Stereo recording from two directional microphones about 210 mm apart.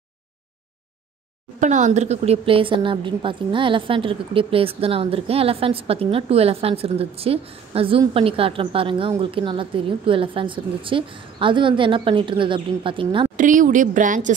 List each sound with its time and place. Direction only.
1.6 s a woman's voice: 35° right (ahead or behind)
13.4 s a woman's voice: 40° right (ahead or behind)